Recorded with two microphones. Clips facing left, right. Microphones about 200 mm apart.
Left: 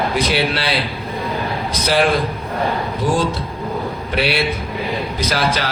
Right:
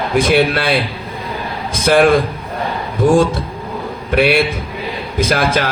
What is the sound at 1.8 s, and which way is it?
A man's voice, 50° right (ahead or behind).